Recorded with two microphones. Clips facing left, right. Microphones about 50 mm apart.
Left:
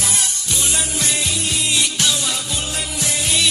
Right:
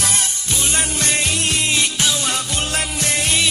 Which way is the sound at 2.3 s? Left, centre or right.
Right.